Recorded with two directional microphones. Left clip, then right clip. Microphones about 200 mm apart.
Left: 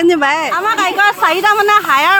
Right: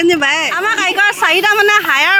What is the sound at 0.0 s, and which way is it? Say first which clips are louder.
Speech: even; 5° left (ahead or behind).